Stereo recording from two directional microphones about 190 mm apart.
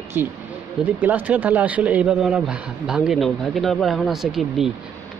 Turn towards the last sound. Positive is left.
turn(degrees=0)  # may be behind; listen again after turning